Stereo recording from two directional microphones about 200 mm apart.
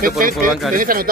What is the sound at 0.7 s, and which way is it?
Speech, 45° right (ahead or behind).